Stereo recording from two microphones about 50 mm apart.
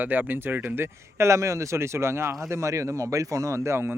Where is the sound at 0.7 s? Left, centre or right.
Right.